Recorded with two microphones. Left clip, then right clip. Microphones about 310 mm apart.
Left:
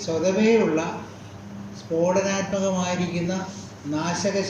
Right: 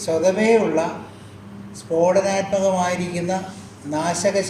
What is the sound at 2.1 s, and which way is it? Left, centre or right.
Speech, right.